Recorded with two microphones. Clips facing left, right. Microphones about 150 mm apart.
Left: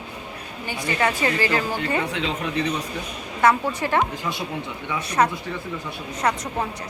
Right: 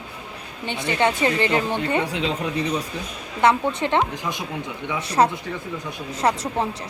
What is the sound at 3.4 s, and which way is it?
Speech, 20° right (ahead or behind).